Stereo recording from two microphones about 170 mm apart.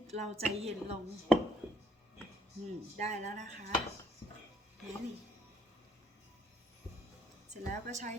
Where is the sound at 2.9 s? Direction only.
45° right (ahead or behind).